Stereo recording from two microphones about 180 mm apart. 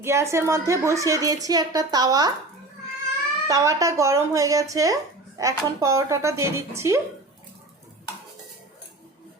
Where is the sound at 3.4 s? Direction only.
15° right (ahead or behind).